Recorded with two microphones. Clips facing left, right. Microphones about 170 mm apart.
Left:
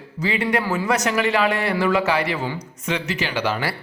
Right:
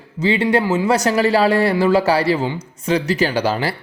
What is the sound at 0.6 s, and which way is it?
Speech, 15° right (ahead or behind).